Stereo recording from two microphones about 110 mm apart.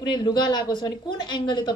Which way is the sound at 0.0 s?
40° left (ahead or behind).